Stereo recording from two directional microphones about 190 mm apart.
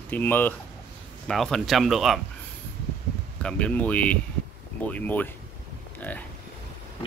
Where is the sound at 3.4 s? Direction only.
5° left (ahead or behind).